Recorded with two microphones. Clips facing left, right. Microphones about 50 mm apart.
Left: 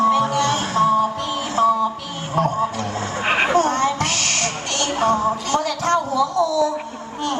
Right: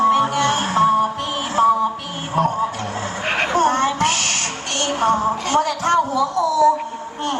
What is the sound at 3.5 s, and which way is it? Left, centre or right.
Music, right.